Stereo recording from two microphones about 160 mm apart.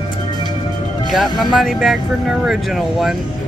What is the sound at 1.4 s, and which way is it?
Speech, centre (ahead or behind).